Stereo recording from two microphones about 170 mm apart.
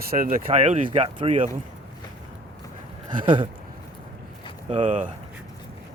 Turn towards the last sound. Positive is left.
turn(degrees=-45)  # may be behind; listen again after turning